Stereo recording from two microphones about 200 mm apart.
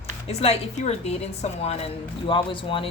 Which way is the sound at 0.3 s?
30° left (ahead or behind).